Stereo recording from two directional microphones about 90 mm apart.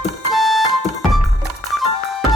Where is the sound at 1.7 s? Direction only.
Centre (ahead or behind).